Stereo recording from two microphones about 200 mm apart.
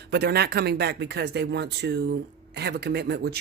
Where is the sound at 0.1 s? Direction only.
55° right (ahead or behind).